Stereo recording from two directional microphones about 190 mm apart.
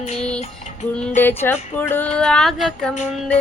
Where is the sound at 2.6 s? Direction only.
5° left (ahead or behind).